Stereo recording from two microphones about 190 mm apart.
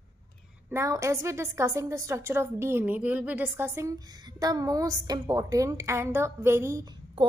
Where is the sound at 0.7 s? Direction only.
15° right (ahead or behind).